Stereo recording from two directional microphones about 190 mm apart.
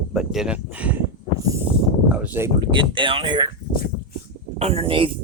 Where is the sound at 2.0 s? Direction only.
5° right (ahead or behind).